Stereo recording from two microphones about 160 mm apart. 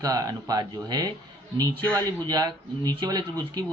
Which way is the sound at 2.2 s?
25° right (ahead or behind).